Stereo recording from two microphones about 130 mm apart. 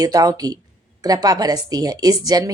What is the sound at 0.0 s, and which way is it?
Speech, 30° right (ahead or behind).